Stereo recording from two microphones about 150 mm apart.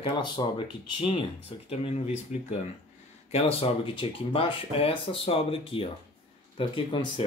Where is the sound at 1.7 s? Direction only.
45° left (ahead or behind).